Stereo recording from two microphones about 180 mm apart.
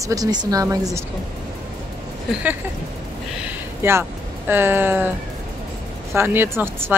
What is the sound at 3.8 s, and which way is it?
Speech, 15° right (ahead or behind).